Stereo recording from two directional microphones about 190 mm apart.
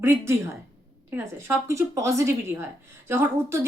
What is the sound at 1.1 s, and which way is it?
Speech, 15° right (ahead or behind).